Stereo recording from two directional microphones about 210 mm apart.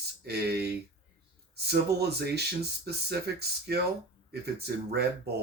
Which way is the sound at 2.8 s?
50° right (ahead or behind).